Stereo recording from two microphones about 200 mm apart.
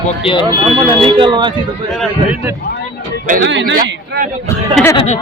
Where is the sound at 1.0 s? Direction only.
25° right (ahead or behind).